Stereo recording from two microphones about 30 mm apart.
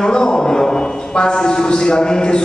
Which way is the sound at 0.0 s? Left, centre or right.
Left.